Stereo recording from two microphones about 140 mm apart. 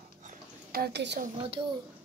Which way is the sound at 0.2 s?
75° right (ahead or behind).